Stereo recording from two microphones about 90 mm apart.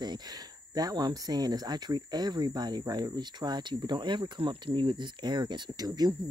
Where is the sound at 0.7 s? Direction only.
50° right (ahead or behind).